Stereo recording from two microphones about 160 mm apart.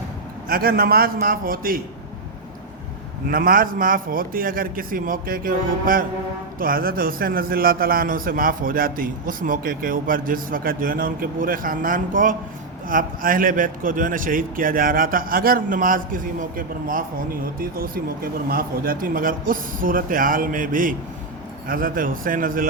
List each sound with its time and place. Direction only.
0.4 s a man's voice: 65° right (ahead or behind)
3.2 s a man's voice: 65° right (ahead or behind)